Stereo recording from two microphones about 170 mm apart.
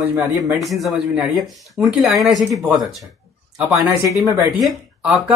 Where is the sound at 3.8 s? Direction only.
15° right (ahead or behind).